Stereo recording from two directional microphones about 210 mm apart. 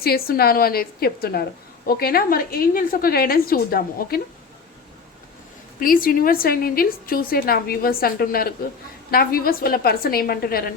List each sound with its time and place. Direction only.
0.0 s a woman's voice: 45° left (ahead or behind)
5.8 s a woman's voice: 40° left (ahead or behind)